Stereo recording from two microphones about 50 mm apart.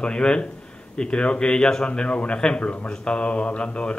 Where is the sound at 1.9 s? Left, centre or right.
Left.